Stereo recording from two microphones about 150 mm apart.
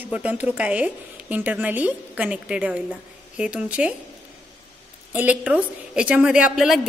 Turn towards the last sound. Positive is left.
turn(degrees=0)  # may be behind; listen again after turning